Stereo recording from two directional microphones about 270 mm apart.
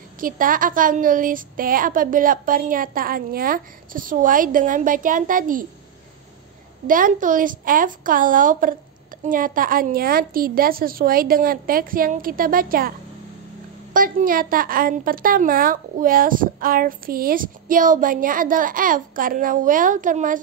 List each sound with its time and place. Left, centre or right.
0.2 s a woman's voice: right
6.9 s a woman's voice: right
13.9 s a woman's voice: right